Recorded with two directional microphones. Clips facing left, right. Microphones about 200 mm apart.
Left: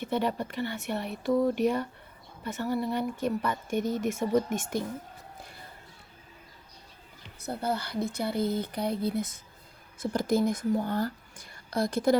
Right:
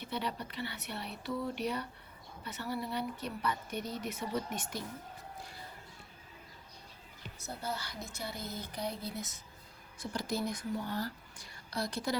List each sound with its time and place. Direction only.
0.0 s speech: 50° left (ahead or behind)
7.4 s speech: 60° left (ahead or behind)